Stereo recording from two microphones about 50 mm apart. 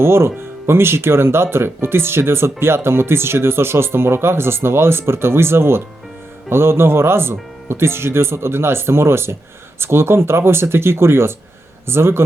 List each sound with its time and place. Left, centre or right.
0.0 s speech: right